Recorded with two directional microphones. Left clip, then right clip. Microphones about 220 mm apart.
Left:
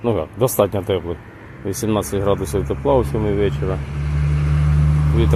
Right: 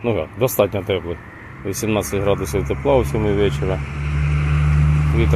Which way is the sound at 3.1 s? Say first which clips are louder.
Right 1 dB; centre (ahead or behind).